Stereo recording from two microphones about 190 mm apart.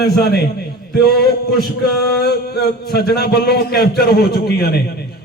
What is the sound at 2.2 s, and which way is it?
A man's voice, 55° left (ahead or behind).